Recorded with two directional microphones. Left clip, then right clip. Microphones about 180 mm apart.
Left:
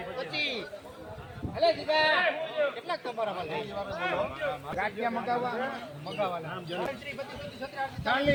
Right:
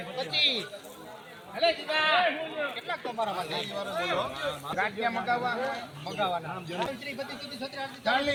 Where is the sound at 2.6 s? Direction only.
35° left (ahead or behind).